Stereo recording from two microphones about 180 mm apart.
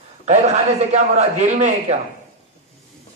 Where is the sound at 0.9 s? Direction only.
40° right (ahead or behind).